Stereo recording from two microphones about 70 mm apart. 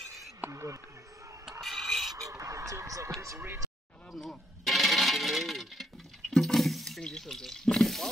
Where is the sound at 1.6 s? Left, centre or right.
Centre.